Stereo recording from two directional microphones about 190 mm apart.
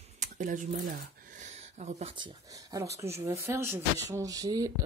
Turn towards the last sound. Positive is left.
turn(degrees=-20)  # may be behind; listen again after turning